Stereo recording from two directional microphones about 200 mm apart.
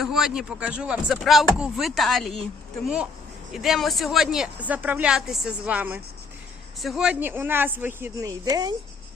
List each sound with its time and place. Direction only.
0.0 s speech: centre (ahead or behind); by 8.7 s 20° right (ahead or behind)